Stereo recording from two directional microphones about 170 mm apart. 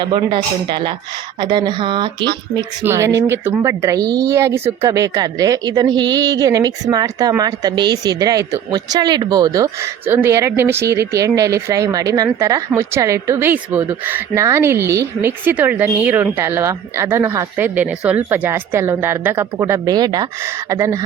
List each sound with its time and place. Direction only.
0.0 s speech: 30° right (ahead or behind)
2.8 s speech: 15° right (ahead or behind)